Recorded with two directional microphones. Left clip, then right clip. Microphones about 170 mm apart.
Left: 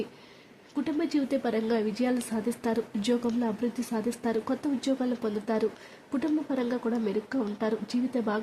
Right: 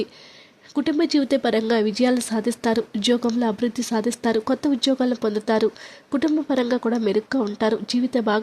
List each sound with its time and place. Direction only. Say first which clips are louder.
0.8 s speech: right 8 dB; 40° right (ahead or behind)